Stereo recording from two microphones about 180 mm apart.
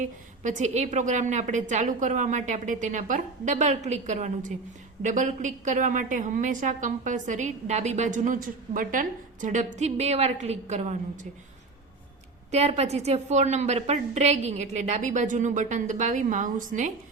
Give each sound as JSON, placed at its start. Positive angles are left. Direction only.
{"t": 0.0, "sound": "a woman's voice", "side_deg": -45}
{"t": 12.5, "sound": "a woman's voice", "side_deg": -35}